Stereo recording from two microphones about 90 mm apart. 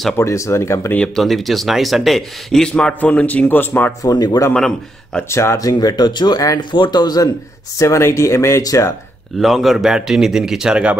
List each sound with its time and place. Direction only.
0.2 s speech: 35° left (ahead or behind)
0.9 s speech: 5° left (ahead or behind)
4.0 s speech: 45° left (ahead or behind)
4.6 s speech: 5° left (ahead or behind)
5.3 s speech: 30° left (ahead or behind)
6.6 s speech: 60° left (ahead or behind)
7.8 s speech: 35° left (ahead or behind)
9.4 s a man's voice: centre (ahead or behind)